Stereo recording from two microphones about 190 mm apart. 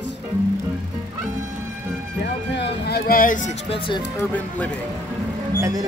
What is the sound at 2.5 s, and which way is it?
Speech, 60° left (ahead or behind).